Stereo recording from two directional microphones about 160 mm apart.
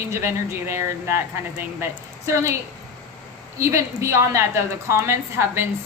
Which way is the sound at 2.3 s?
15° right (ahead or behind).